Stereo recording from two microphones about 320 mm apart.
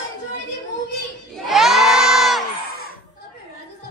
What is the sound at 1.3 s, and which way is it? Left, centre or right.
Crowd, centre.